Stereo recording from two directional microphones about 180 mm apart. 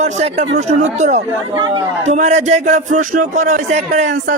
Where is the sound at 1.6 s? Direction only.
25° right (ahead or behind).